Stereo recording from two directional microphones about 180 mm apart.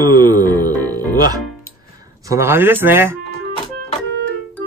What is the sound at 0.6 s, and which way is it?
Speech, 20° right (ahead or behind).